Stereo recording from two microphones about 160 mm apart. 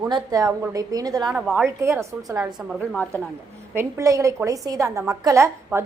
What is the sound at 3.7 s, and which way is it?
A woman's voice, 15° right (ahead or behind).